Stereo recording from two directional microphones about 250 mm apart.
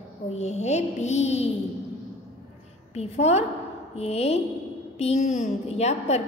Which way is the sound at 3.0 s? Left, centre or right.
Left.